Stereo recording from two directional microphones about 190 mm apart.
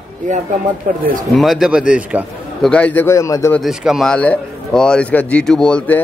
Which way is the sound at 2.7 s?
10° left (ahead or behind).